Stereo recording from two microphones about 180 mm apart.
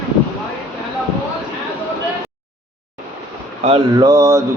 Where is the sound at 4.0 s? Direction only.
20° right (ahead or behind).